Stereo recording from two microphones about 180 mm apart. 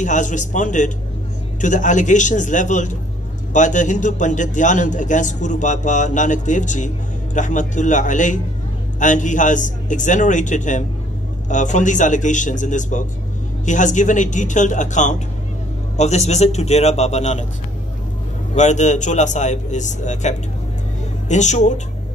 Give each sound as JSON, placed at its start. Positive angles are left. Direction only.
{"t": 0.0, "sound": "a man's voice", "side_deg": 45}
{"t": 18.5, "sound": "speech", "side_deg": 40}